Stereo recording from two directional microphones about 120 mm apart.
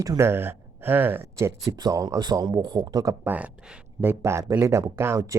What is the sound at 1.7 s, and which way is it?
A man's voice, 30° right (ahead or behind).